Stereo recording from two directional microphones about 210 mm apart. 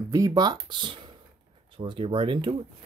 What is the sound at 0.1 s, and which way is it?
Speech, 15° right (ahead or behind).